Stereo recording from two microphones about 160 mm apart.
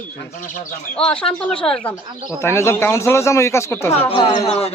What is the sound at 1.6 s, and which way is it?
Speech, 5° left (ahead or behind).